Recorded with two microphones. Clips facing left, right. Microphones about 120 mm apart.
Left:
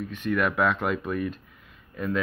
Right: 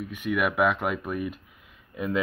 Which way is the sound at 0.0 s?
10° right (ahead or behind).